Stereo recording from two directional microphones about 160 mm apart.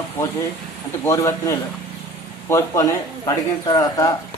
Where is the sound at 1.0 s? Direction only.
20° left (ahead or behind).